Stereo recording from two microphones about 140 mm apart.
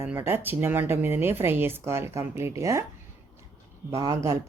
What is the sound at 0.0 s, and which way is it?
Speech, 15° right (ahead or behind).